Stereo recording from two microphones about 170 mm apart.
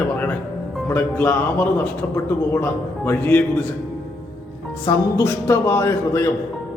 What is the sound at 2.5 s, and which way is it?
Speech, 15° left (ahead or behind).